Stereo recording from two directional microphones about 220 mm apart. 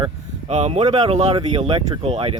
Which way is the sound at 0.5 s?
30° right (ahead or behind).